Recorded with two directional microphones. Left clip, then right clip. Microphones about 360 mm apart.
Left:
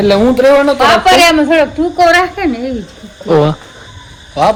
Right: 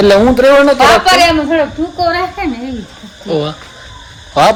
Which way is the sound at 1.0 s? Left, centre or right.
Left.